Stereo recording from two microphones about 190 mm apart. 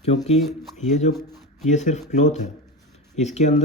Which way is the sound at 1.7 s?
40° left (ahead or behind).